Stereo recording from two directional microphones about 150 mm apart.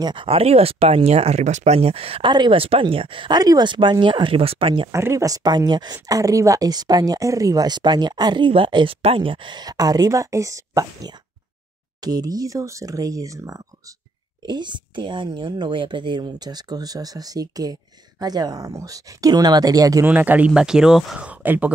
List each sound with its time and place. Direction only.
0.0 s speech: 35° right (ahead or behind)
4.9 s speech: 20° right (ahead or behind)
20.1 s speech: 10° right (ahead or behind)